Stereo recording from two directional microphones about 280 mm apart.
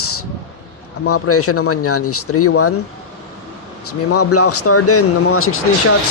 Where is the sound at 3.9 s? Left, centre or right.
Left.